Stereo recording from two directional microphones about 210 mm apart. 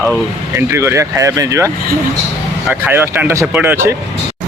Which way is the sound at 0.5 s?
10° right (ahead or behind).